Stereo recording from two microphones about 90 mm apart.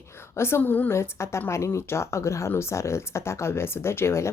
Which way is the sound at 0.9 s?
30° left (ahead or behind).